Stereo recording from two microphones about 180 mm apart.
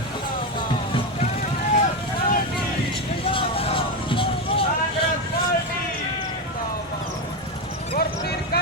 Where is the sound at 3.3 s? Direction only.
30° left (ahead or behind).